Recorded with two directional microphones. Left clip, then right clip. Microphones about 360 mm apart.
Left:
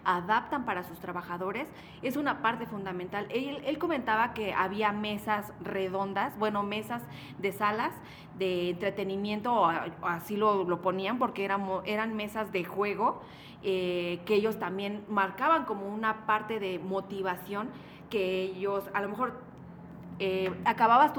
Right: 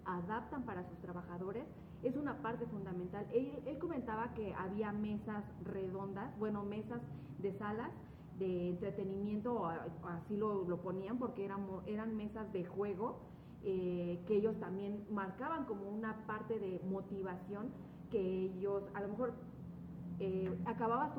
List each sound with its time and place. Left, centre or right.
0.0 s a woman's voice: left